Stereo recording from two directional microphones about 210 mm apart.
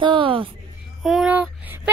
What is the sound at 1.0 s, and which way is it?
Child singing, 5° right (ahead or behind).